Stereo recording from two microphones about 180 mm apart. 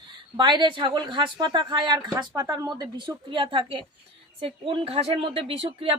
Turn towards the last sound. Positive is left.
turn(degrees=-30)  # may be behind; listen again after turning